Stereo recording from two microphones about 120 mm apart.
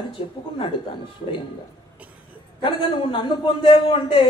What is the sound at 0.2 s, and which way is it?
Speech, 50° left (ahead or behind).